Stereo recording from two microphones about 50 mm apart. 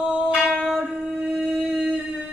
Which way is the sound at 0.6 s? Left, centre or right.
Centre.